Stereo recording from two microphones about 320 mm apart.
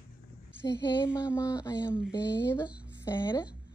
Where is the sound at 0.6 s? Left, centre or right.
Centre.